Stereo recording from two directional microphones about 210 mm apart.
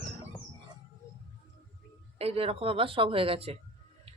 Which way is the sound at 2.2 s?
25° right (ahead or behind).